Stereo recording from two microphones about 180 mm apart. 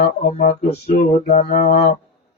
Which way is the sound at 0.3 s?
35° left (ahead or behind).